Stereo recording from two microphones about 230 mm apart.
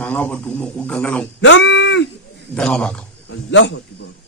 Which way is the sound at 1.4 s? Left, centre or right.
Left.